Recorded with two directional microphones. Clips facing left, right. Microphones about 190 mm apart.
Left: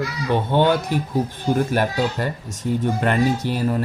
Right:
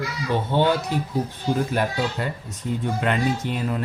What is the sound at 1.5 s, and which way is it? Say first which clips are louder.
A man's voice: left 3 dB; 45° left (ahead or behind).